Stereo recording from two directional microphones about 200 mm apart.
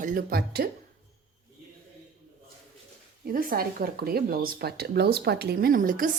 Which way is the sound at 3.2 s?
45° right (ahead or behind).